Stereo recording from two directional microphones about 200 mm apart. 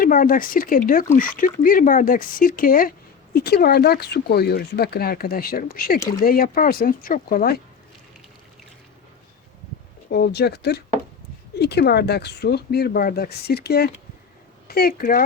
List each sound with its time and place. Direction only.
0.0 s speech: 45° left (ahead or behind)
10.1 s speech: 55° left (ahead or behind)